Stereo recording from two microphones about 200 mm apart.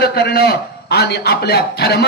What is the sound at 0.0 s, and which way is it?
A man's voice, 50° left (ahead or behind).